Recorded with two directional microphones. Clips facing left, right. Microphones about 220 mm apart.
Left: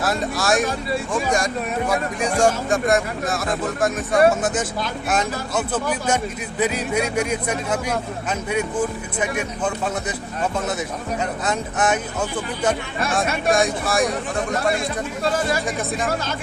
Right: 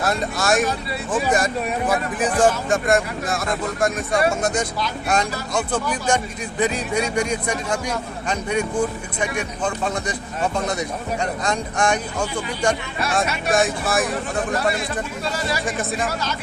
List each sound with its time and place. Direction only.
0.0 s speech: centre (ahead or behind)
15.3 s speech: 50° left (ahead or behind)